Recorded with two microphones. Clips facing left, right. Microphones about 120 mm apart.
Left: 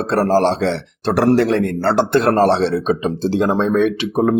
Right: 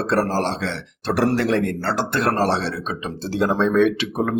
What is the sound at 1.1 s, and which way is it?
Speech, 40° left (ahead or behind).